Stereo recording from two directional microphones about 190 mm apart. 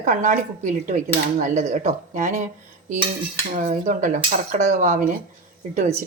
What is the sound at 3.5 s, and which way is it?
Speech, 40° right (ahead or behind).